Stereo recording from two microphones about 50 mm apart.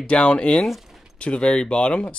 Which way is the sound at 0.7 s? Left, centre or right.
Centre.